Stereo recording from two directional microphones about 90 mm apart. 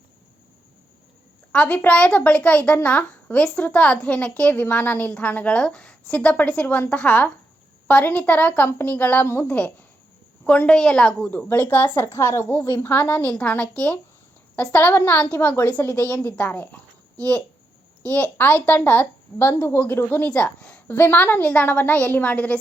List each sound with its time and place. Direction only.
1.5 s a child's voice: 15° left (ahead or behind)
10.4 s a child's voice: 15° left (ahead or behind)
11.3 s a woman's voice: 20° left (ahead or behind)
18.0 s a woman's voice: 15° left (ahead or behind)